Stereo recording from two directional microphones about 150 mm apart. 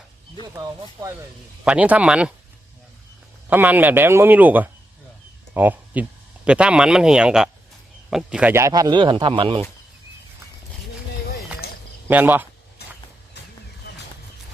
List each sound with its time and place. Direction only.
0.5 s speech: 25° right (ahead or behind)
1.6 s speech: 10° right (ahead or behind)
3.5 s speech: 10° right (ahead or behind); by 9.6 s 35° right (ahead or behind)
11.6 s a sound: 90° left
12.0 s speech: 15° right (ahead or behind)